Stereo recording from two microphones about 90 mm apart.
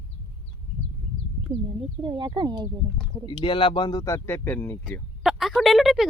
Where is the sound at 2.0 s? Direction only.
60° right (ahead or behind).